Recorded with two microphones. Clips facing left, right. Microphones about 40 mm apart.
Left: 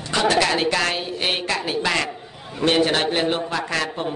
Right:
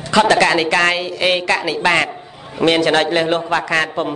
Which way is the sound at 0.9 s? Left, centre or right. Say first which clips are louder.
Right 7 dB; right.